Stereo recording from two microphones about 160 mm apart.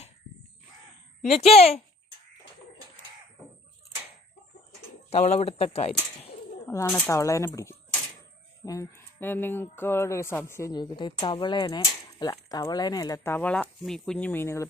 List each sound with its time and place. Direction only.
1.2 s speech: 40° left (ahead or behind)
5.1 s speech: 40° left (ahead or behind)
6.7 s speech: 15° left (ahead or behind)